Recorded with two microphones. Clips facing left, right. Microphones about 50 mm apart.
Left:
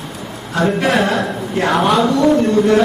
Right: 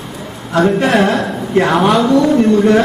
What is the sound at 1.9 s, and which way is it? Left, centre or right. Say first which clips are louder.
Speech: right 2 dB; centre.